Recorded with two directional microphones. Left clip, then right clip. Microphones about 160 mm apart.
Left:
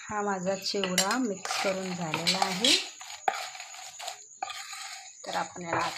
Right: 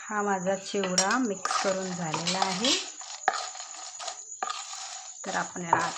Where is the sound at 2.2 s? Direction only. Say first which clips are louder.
Left 2 dB; centre (ahead or behind).